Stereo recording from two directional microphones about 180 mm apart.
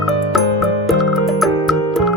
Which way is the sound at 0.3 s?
Centre (ahead or behind).